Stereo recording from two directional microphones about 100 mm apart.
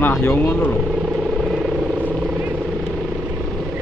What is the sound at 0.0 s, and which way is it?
Speech, 15° left (ahead or behind).